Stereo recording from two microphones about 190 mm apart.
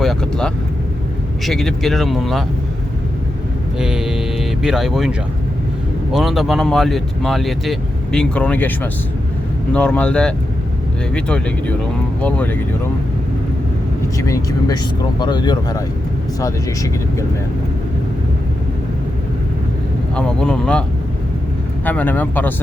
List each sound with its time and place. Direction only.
0.0 s speech: centre (ahead or behind)
3.8 s speech: 5° right (ahead or behind)
14.2 s speech: 15° left (ahead or behind)
20.1 s speech: 5° left (ahead or behind)
21.8 s speech: 10° left (ahead or behind)